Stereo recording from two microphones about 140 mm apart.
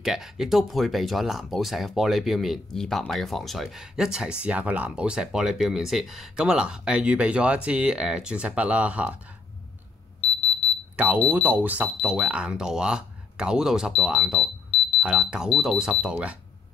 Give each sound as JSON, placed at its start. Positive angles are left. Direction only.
{"t": 0.0, "sound": "speech", "side_deg": -5}
{"t": 11.0, "sound": "speech", "side_deg": -10}